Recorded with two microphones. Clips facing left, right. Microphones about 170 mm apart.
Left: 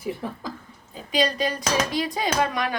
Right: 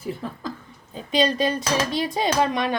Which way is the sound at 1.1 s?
25° right (ahead or behind).